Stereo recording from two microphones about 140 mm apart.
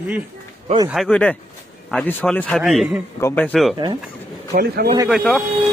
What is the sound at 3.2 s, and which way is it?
Speech, 10° left (ahead or behind).